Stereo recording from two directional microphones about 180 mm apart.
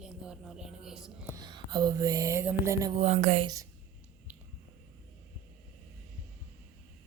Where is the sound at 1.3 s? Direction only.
25° right (ahead or behind).